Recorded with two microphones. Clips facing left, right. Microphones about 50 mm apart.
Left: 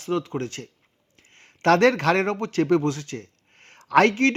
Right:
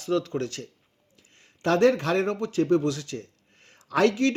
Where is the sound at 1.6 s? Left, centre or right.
Left.